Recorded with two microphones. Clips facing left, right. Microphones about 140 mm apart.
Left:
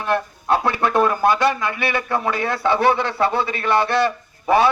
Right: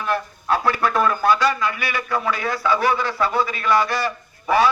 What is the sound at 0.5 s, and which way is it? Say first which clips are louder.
A man's voice: left 2 dB; 20° left (ahead or behind).